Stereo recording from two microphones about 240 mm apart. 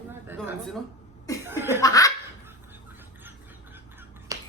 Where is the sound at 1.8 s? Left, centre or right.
Centre.